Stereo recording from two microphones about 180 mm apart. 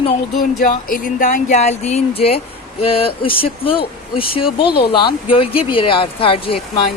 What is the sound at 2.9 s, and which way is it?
A woman's voice, 30° left (ahead or behind).